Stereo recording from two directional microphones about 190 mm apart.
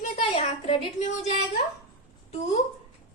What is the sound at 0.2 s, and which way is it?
A woman's voice, 30° left (ahead or behind).